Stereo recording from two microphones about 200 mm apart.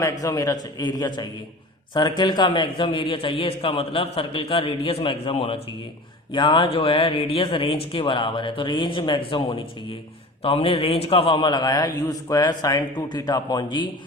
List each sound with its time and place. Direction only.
0.0 s a man's voice: 15° left (ahead or behind)